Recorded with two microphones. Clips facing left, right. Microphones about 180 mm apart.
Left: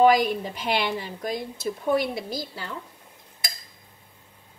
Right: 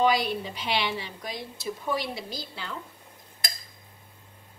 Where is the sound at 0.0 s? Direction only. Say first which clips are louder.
Left 6 dB; 50° left (ahead or behind).